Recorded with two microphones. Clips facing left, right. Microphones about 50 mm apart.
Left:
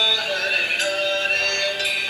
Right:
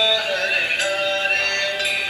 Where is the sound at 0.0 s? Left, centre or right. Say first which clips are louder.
Right 2 dB; centre.